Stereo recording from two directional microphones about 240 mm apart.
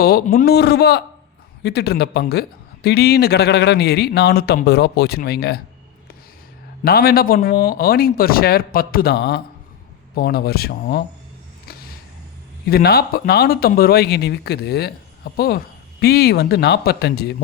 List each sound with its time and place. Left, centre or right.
0.0 s speech: left
6.8 s speech: left
12.6 s speech: left